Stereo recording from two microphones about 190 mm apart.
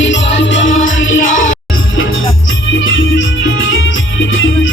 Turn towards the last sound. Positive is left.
turn(degrees=90)